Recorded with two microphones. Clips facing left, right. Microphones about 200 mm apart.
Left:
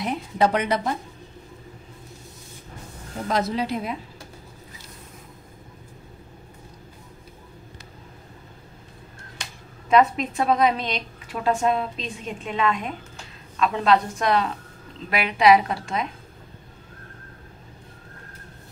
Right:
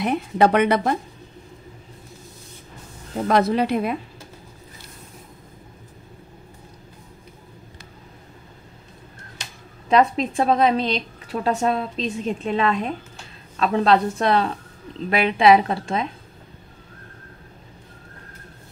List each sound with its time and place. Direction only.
0.0 s speech: 60° right (ahead or behind)
3.3 s speech: 60° right (ahead or behind)
9.8 s a woman's voice: 30° right (ahead or behind)